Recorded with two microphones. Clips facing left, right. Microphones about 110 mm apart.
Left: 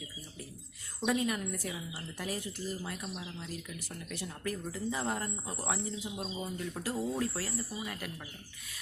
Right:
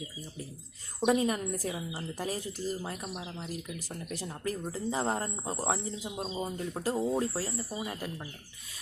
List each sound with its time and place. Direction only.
1.0 s speech: 35° right (ahead or behind)